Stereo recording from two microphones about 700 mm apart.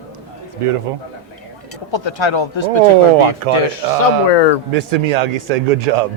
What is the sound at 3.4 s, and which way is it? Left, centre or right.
Speech, right.